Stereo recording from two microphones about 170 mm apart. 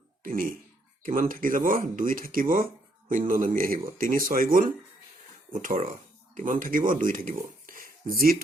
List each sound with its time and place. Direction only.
0.2 s speech: 55° right (ahead or behind)
6.3 s speech: 50° right (ahead or behind)